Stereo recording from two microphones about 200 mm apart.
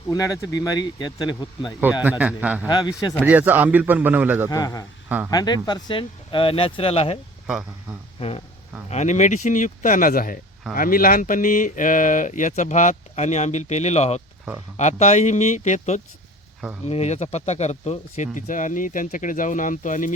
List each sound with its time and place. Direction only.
0.1 s speech: 15° left (ahead or behind)
1.8 s a man's voice: 10° right (ahead or behind)
2.6 s speech: 20° left (ahead or behind)
3.2 s a man's voice: 10° right (ahead or behind)
4.4 s speech: 15° left (ahead or behind)
5.0 s speech: 10° right (ahead or behind)
5.3 s speech: 20° left (ahead or behind)
7.4 s speech: 5° right (ahead or behind)
8.9 s speech: 35° left (ahead or behind)